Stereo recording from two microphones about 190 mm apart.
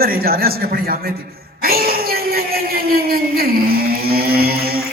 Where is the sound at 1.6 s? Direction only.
50° right (ahead or behind).